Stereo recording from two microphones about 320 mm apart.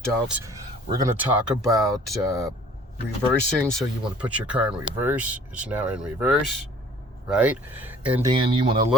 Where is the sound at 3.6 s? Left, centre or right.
Centre.